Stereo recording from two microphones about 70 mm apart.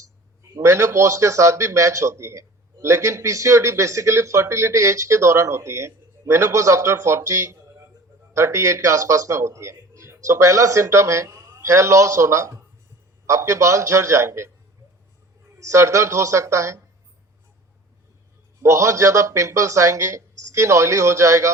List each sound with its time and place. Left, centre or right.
0.6 s a man's voice: right
15.5 s a man's voice: right
18.6 s a man's voice: right